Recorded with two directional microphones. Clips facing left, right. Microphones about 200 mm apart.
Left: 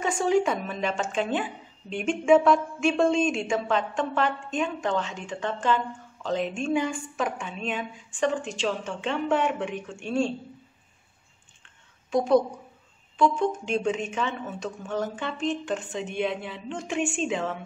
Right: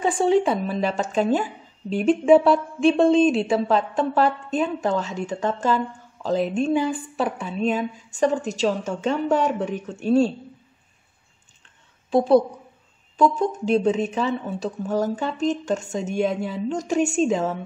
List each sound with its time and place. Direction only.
0.0 s a woman's voice: 30° right (ahead or behind)
13.2 s a woman's voice: 40° right (ahead or behind)